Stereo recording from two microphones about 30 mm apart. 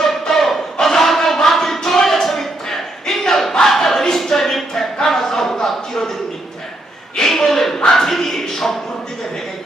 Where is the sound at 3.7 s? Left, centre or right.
Centre.